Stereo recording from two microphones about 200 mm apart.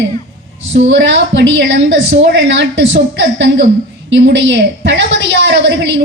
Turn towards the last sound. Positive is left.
turn(degrees=-60)  # may be behind; listen again after turning